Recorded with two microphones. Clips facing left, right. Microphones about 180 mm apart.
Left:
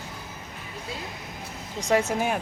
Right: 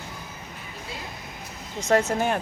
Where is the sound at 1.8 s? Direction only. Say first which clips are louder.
Right 2 dB; 10° left (ahead or behind).